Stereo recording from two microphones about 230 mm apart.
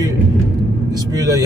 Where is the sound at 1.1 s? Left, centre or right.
Centre.